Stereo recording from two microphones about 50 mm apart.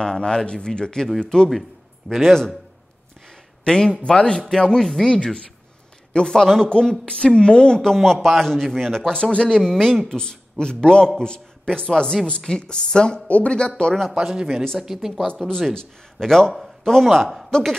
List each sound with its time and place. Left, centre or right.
0.0 s a man's voice: centre
2.0 s a man's voice: centre
4.8 s a man's voice: centre
5.1 s a man's voice: centre
14.1 s speech: centre
15.7 s a man's voice: centre